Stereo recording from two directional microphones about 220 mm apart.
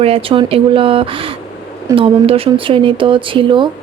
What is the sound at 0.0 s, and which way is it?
Speech, 25° right (ahead or behind).